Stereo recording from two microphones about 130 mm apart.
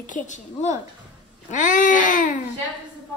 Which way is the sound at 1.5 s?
75° left (ahead or behind).